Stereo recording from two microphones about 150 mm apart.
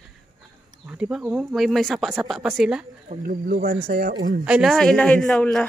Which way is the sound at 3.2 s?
75° right (ahead or behind).